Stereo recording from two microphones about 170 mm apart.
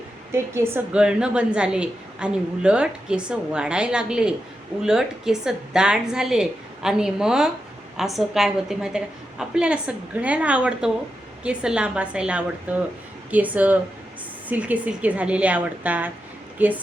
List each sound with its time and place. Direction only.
0.3 s a woman's voice: 15° right (ahead or behind)